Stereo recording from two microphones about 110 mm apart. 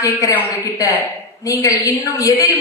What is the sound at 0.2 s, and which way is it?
Speech, 30° left (ahead or behind).